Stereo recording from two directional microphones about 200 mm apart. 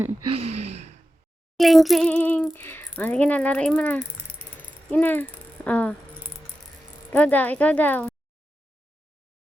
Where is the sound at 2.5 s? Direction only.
10° left (ahead or behind).